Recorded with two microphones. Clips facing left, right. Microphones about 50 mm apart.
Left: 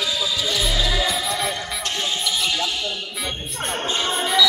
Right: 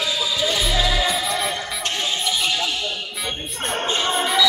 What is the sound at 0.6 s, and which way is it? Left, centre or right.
Music, centre.